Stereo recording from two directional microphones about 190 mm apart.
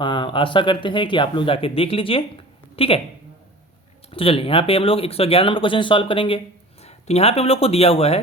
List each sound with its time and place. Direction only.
0.0 s speech: 25° left (ahead or behind)
4.1 s speech: 30° left (ahead or behind)